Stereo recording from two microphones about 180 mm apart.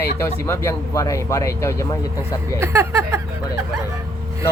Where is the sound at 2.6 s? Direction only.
15° right (ahead or behind).